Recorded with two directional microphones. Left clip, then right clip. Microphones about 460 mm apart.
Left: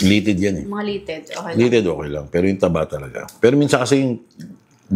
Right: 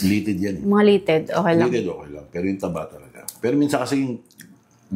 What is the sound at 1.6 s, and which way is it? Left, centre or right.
Speech, left.